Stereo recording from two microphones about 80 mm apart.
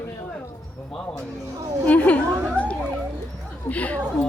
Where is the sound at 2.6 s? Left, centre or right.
Centre.